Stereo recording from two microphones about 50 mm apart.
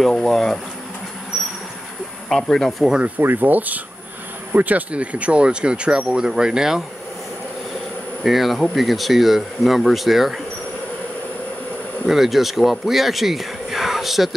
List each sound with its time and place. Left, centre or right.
0.0 s speech: centre
2.2 s speech: centre
3.2 s speech: right; by 6.8 s centre
8.2 s speech: centre
12.1 s speech: centre